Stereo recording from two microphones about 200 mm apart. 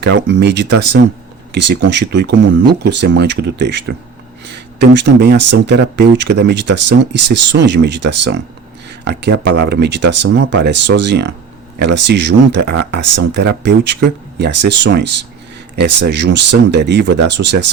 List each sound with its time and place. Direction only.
0.1 s speech: 60° right (ahead or behind)
4.8 s speech: 60° right (ahead or behind)